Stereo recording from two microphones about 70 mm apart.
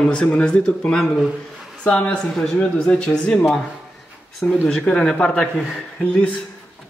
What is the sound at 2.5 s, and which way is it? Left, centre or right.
Speech, centre.